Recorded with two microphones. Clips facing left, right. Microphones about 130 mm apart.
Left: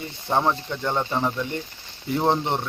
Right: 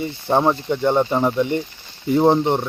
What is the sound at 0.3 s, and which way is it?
Speech, 20° right (ahead or behind).